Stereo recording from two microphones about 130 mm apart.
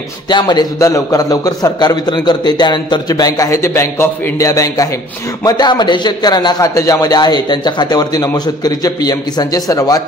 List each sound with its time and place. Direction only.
0.3 s a man's voice: 35° left (ahead or behind)